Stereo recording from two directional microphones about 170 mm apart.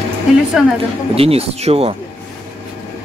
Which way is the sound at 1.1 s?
35° right (ahead or behind).